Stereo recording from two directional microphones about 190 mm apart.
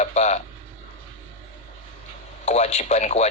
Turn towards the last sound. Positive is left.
turn(degrees=35)  # may be behind; listen again after turning